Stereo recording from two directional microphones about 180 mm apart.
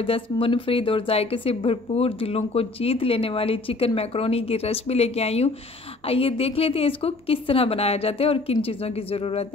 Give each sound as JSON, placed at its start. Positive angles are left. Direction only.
{"t": 0.0, "sound": "a woman's voice", "side_deg": 30}